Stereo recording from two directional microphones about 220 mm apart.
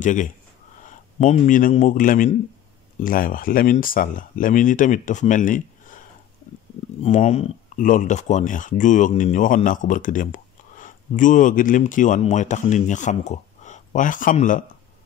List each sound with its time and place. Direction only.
0.0 s speech: 35° left (ahead or behind)